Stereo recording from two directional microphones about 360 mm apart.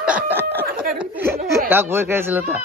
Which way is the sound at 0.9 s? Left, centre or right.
Centre.